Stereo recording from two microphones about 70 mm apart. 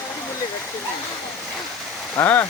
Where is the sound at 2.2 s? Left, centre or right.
Left.